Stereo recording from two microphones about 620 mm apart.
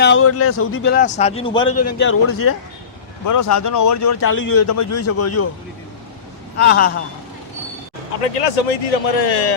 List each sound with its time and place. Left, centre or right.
0.0 s a man's voice: centre
6.6 s a man's voice: centre
8.2 s speech: left